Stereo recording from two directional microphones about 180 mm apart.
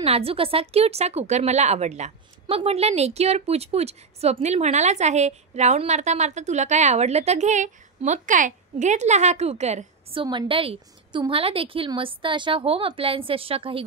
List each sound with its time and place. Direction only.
0.0 s a woman's voice: 35° right (ahead or behind)
10.2 s a woman's voice: 30° right (ahead or behind)